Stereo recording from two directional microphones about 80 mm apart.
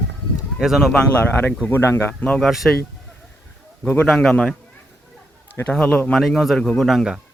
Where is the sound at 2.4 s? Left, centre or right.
Centre.